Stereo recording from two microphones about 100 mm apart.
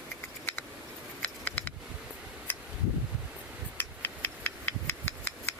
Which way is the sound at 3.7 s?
20° left (ahead or behind).